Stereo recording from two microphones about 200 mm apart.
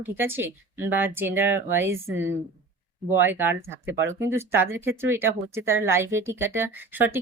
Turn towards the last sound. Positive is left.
turn(degrees=-10)  # may be behind; listen again after turning